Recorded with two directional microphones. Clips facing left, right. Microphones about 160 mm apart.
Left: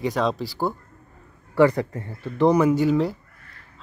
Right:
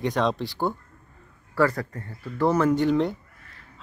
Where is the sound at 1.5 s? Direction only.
20° left (ahead or behind).